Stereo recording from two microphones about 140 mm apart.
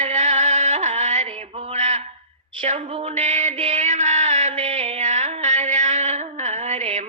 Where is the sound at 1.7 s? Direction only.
55° right (ahead or behind).